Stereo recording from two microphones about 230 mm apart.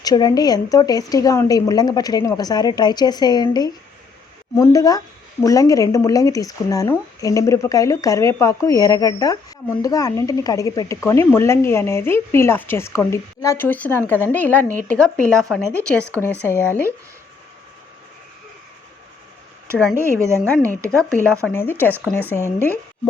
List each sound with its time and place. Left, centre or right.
0.0 s speech: centre
19.6 s speech: centre
21.4 s speech: centre